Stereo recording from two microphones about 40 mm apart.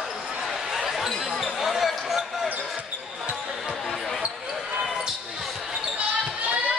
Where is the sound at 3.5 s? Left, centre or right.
Centre.